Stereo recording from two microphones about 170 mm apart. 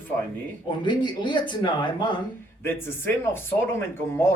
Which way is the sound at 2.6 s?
15° left (ahead or behind).